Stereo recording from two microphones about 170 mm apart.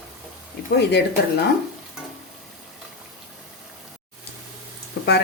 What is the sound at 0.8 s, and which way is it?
Speech, 80° left.